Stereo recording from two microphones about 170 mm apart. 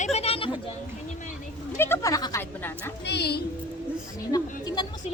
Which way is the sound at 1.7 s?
15° left (ahead or behind).